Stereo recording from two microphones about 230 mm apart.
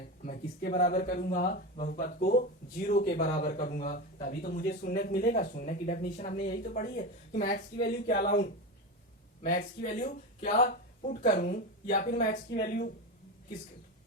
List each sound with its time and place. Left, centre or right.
0.3 s speech: left